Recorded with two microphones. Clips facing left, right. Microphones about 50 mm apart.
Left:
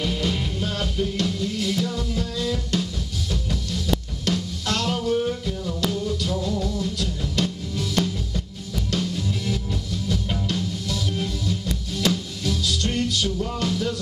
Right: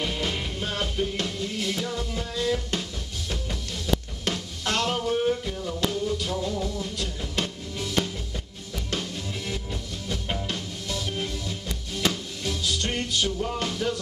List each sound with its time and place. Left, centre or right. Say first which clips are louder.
0.0 s music: left 3 dB; centre